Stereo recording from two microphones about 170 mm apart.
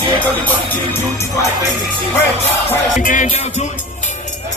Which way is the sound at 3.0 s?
50° left (ahead or behind).